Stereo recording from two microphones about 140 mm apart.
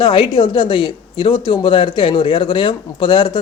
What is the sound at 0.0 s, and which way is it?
Speech, 40° left (ahead or behind).